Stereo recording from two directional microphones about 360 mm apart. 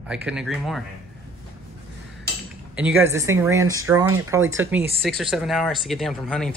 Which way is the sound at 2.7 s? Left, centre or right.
Centre.